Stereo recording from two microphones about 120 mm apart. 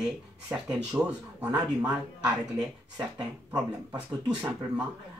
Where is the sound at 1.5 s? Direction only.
35° right (ahead or behind).